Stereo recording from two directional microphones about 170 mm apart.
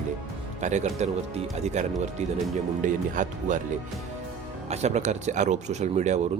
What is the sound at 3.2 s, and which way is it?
Speech, 45° right (ahead or behind).